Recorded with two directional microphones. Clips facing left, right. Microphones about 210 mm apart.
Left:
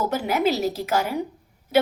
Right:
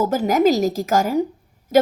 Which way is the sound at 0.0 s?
45° right (ahead or behind).